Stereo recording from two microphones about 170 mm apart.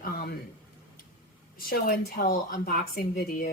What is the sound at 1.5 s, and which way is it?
A woman's voice, 60° left (ahead or behind).